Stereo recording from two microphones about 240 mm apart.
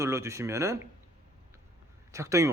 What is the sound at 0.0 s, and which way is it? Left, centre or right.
Speech, centre.